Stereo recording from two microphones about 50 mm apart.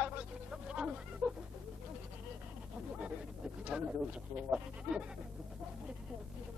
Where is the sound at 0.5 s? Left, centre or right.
Centre.